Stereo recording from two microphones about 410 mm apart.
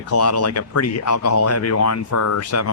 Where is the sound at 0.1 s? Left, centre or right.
Left.